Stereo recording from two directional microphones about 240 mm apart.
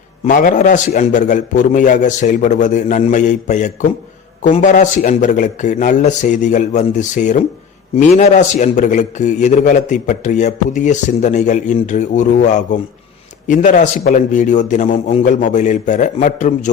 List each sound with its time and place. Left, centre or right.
0.3 s a man's voice: left